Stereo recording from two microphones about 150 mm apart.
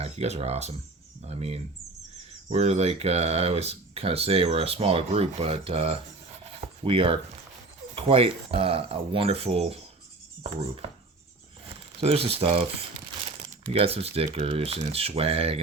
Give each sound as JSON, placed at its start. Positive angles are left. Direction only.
{"t": 0.0, "sound": "speech", "side_deg": -45}
{"t": 6.4, "sound": "a sound", "side_deg": -35}
{"t": 7.9, "sound": "speech", "side_deg": -40}
{"t": 11.9, "sound": "speech", "side_deg": -40}